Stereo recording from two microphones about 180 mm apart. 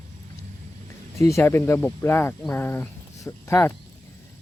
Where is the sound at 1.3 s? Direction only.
15° left (ahead or behind).